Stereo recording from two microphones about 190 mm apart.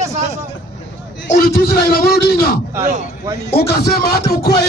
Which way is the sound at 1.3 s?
50° left (ahead or behind).